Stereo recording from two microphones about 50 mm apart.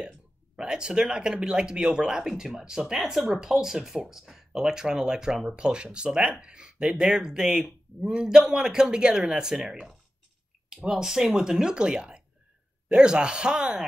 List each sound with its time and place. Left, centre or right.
0.6 s speech: centre
9.7 s speech: centre